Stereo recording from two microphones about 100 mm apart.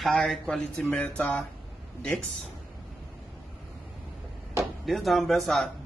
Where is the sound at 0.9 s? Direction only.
20° left (ahead or behind).